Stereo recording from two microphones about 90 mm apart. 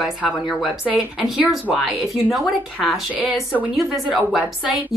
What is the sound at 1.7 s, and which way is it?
A woman's voice, 5° right (ahead or behind).